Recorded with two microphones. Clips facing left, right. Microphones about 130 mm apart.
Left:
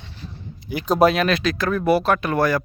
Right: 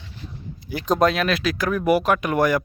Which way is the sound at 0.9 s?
5° left (ahead or behind).